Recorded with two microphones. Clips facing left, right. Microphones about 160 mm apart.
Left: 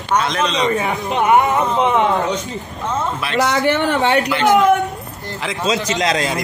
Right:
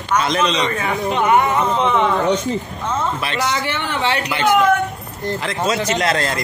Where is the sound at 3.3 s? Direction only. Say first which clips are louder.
Left 6 dB; 50° left (ahead or behind).